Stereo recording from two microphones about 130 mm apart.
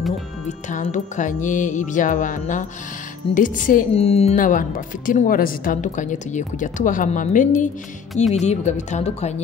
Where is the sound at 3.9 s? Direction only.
50° left (ahead or behind).